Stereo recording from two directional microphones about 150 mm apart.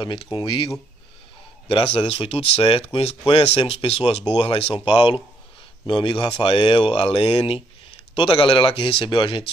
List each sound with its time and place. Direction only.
0.0 s speech: 35° left (ahead or behind)
1.7 s speech: 40° left (ahead or behind)